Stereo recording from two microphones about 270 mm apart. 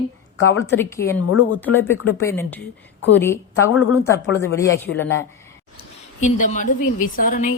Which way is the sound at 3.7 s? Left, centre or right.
Left.